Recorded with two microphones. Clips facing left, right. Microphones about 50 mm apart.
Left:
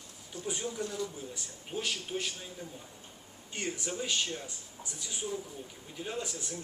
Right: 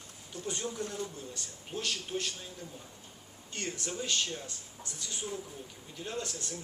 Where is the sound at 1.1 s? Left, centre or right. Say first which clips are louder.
Left 1 dB; centre.